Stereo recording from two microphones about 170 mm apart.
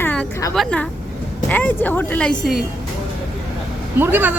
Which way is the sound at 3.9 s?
10° right (ahead or behind).